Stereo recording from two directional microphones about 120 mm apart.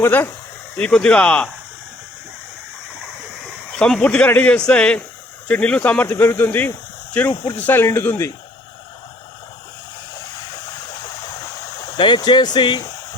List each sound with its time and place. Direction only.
0.0 s speech: 20° left (ahead or behind)
0.8 s speech: 10° left (ahead or behind)
3.7 s speech: 5° left (ahead or behind)
11.9 s speech: 40° left (ahead or behind)